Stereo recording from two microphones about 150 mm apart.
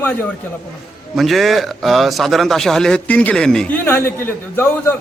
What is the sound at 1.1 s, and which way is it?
A man's voice, centre (ahead or behind).